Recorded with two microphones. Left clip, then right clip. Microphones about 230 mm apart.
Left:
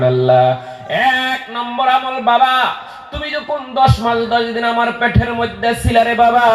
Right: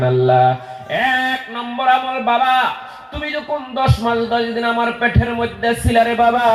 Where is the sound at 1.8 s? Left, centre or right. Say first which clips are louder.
Left 1 dB; left.